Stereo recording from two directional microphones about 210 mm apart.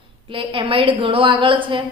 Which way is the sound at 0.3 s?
25° right (ahead or behind).